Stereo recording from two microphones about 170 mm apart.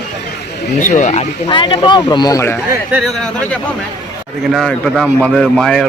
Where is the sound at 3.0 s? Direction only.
Centre (ahead or behind).